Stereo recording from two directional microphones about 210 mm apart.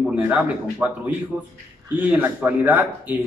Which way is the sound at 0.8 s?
10° right (ahead or behind).